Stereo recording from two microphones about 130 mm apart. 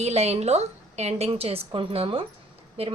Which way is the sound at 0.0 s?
55° right (ahead or behind).